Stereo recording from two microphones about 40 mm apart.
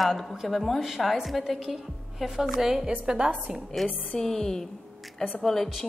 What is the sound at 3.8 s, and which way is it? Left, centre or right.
A woman's voice, centre.